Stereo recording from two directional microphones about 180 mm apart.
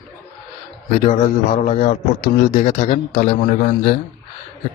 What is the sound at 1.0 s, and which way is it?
A man's voice, 35° left (ahead or behind).